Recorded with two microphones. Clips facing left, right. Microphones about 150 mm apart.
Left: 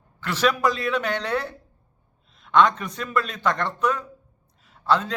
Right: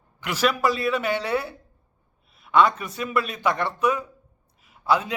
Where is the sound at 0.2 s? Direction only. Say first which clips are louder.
Left 1 dB; 10° right (ahead or behind).